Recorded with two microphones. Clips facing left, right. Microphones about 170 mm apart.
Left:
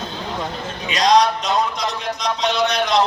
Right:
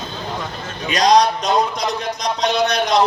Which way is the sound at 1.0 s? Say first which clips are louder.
Right 1 dB; 40° right (ahead or behind).